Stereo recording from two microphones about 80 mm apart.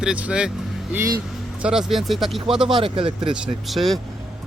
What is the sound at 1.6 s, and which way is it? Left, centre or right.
Speech, centre.